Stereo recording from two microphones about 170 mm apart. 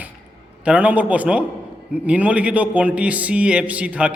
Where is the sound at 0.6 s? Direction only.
5° right (ahead or behind).